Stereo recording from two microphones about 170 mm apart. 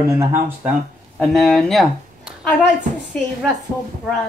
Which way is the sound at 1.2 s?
5° left (ahead or behind).